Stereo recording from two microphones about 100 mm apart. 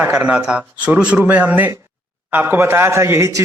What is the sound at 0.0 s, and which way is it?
Speech, 15° right (ahead or behind).